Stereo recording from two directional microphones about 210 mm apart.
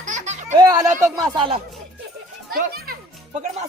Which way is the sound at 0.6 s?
15° right (ahead or behind).